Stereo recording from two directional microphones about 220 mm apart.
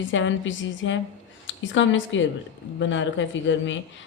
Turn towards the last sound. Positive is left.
turn(degrees=55)  # may be behind; listen again after turning